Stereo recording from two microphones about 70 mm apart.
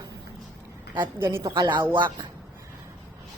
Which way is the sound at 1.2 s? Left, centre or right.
Right.